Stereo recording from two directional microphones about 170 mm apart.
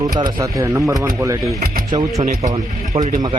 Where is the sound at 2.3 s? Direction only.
45° right (ahead or behind).